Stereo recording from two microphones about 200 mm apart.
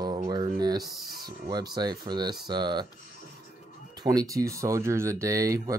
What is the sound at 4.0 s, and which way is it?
Speech, 20° right (ahead or behind).